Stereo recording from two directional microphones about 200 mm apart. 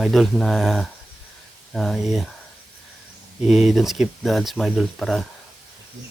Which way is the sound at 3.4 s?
Centre (ahead or behind).